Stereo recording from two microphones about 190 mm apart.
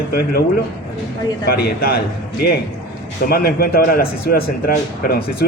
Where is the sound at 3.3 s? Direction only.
55° left (ahead or behind).